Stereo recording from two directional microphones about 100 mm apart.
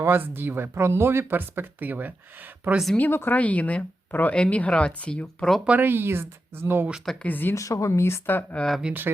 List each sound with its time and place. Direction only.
0.0 s speech: 20° right (ahead or behind)
2.7 s speech: centre (ahead or behind)
3.0 s speech: 20° left (ahead or behind)
5.6 s speech: 20° right (ahead or behind)
7.0 s speech: 5° left (ahead or behind)
7.3 s speech: 20° left (ahead or behind)
7.5 s speech: 30° left (ahead or behind)
8.8 s speech: 15° right (ahead or behind)